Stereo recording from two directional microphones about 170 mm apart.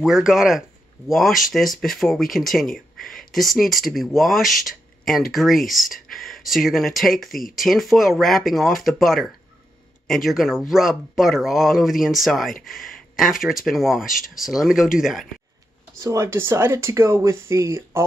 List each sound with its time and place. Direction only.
0.0 s speech: centre (ahead or behind)
16.0 s speech: 20° right (ahead or behind)